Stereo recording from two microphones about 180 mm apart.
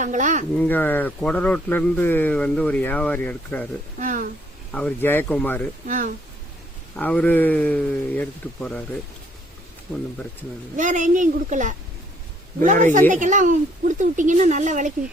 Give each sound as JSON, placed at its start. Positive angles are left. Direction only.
{"t": 0.0, "sound": "speech", "side_deg": -45}
{"t": 0.6, "sound": "a man's voice", "side_deg": 10}
{"t": 3.9, "sound": "speech", "side_deg": -45}
{"t": 4.7, "sound": "a man's voice", "side_deg": 5}
{"t": 5.8, "sound": "speech", "side_deg": -45}
{"t": 6.9, "sound": "a man's voice", "side_deg": 5}
{"t": 10.8, "sound": "speech", "side_deg": -45}